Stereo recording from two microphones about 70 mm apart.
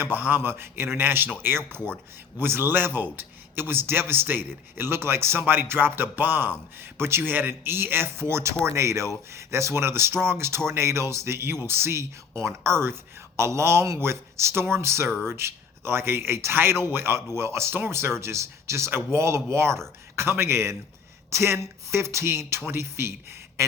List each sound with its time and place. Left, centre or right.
0.0 s a man's voice: right